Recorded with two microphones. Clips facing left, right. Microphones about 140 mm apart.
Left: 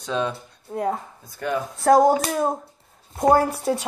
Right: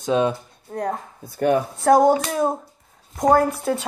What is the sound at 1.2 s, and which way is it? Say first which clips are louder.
Speech: right 8 dB; 60° right (ahead or behind).